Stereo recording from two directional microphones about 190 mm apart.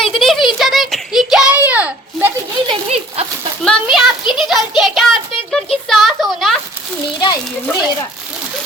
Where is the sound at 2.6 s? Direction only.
30° right (ahead or behind).